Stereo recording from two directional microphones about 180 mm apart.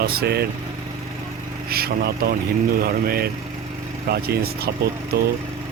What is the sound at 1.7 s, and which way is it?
Speech, 60° right (ahead or behind).